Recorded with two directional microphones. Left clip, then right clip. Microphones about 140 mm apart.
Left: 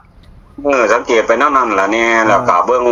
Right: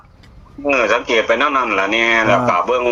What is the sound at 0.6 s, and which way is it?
Speech, 30° left (ahead or behind).